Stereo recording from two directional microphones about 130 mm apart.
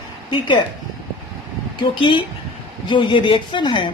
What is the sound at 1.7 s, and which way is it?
Speech, 40° left (ahead or behind).